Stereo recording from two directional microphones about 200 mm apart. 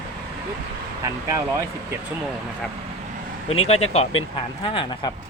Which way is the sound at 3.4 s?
30° left (ahead or behind).